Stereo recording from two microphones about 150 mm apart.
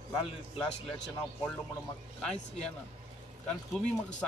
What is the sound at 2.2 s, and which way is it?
Speech, 5° left (ahead or behind).